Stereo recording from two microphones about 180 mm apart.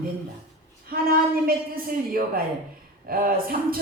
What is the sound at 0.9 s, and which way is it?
A woman's voice, 55° right (ahead or behind).